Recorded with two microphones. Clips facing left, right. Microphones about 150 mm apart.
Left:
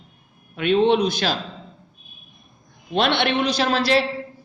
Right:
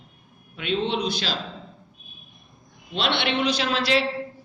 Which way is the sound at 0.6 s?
55° left (ahead or behind).